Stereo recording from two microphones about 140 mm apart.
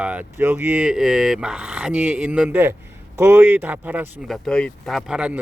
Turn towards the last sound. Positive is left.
turn(degrees=-5)  # may be behind; listen again after turning